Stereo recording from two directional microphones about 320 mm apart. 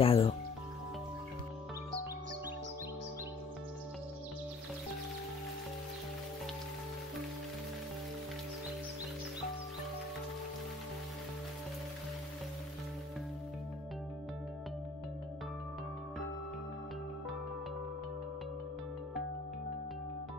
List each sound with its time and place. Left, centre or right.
0.0 s music: centre